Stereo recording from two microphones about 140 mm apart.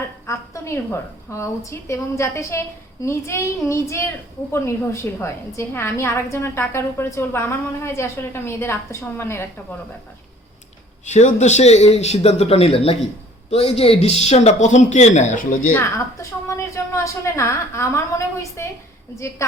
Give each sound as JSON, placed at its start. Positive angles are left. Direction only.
{"t": 0.3, "sound": "a woman's voice", "side_deg": 20}
{"t": 11.0, "sound": "speech", "side_deg": 55}
{"t": 16.5, "sound": "a woman's voice", "side_deg": 20}